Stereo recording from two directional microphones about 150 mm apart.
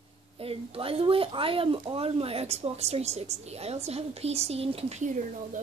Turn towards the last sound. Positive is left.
turn(degrees=-55)  # may be behind; listen again after turning